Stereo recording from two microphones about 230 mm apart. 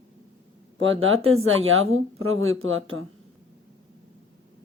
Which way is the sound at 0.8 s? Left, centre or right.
Right.